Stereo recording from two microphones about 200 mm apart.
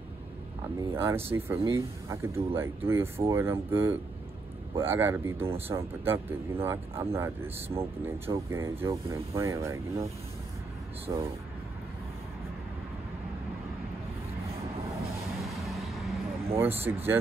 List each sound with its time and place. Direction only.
0.9 s speech: 10° right (ahead or behind)
11.1 s speech: 20° right (ahead or behind)
15.5 s music: centre (ahead or behind)
16.5 s speech: 10° right (ahead or behind)